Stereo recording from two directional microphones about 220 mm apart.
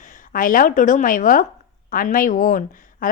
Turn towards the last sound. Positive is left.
turn(degrees=40)  # may be behind; listen again after turning